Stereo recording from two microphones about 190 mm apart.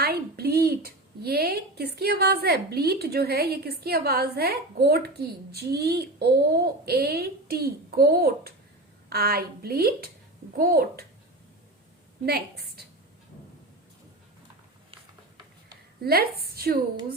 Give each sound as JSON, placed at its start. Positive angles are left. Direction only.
{"t": 0.0, "sound": "a woman's voice", "side_deg": -55}
{"t": 12.2, "sound": "speech", "side_deg": -55}
{"t": 16.0, "sound": "speech", "side_deg": -55}
{"t": 16.5, "sound": "a sound", "side_deg": -55}